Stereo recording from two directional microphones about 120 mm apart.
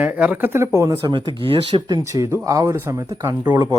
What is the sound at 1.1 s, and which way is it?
Speech, 40° right (ahead or behind).